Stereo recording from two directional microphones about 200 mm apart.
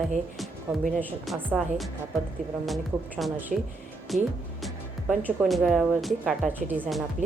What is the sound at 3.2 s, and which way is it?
Speech, 5° right (ahead or behind).